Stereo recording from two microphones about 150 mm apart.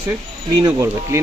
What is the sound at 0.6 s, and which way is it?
Speech, 25° right (ahead or behind).